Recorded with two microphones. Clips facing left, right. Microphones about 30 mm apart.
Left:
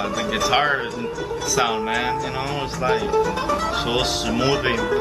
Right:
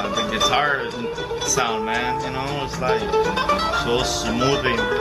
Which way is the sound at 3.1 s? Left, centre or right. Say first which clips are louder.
Right 1 dB; right.